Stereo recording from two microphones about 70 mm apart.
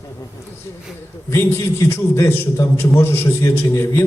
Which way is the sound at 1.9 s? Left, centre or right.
Left.